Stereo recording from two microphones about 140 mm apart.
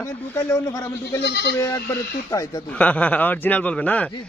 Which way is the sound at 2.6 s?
10° left (ahead or behind).